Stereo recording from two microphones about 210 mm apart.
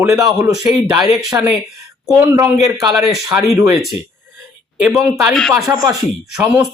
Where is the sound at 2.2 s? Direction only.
15° right (ahead or behind).